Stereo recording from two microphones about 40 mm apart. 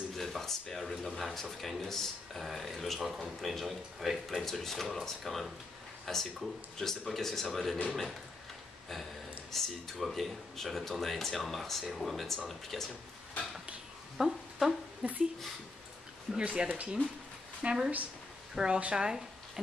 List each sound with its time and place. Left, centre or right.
0.1 s speech: centre
9.5 s speech: centre
14.1 s a sound: centre
15.0 s speech: right
16.3 s speech: right
18.5 s speech: centre